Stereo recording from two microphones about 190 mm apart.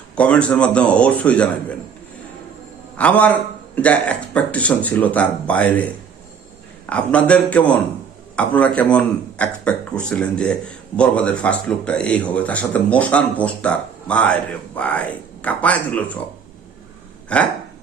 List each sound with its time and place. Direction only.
0.2 s a man's voice: 5° left (ahead or behind)
3.0 s a man's voice: 5° left (ahead or behind)
6.9 s a man's voice: 5° left (ahead or behind)
17.2 s a sound: 5° left (ahead or behind)